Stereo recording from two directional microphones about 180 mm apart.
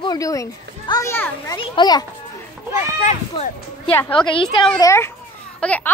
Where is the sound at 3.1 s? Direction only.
35° left (ahead or behind).